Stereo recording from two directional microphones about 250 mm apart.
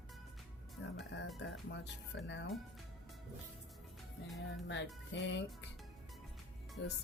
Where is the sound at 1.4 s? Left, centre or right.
Left.